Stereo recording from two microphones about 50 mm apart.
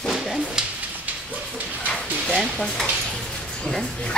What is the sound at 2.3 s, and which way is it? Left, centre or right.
Stir, centre.